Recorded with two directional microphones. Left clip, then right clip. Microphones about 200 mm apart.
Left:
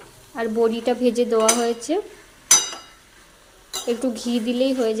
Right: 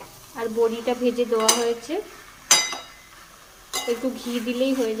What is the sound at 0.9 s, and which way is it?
Dishes, 30° left (ahead or behind).